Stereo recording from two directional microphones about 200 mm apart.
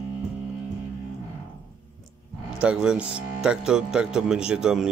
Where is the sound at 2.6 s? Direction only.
5° right (ahead or behind).